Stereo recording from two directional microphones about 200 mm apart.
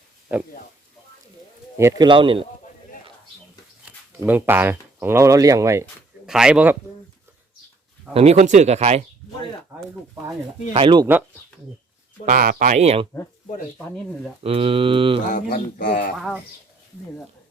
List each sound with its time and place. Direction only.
0.3 s speech: 10° right (ahead or behind)
1.8 s speech: 20° right (ahead or behind)
3.8 s speech: 10° right (ahead or behind)
6.2 s speech: 5° right (ahead or behind)
8.1 s speech: 30° right (ahead or behind)
10.8 s speech: 25° right (ahead or behind)
12.2 s speech: 45° right (ahead or behind)
13.7 s speech: 5° left (ahead or behind)
14.4 s speech: 30° right (ahead or behind)
15.3 s speech: 45° left (ahead or behind)
16.1 s speech: centre (ahead or behind)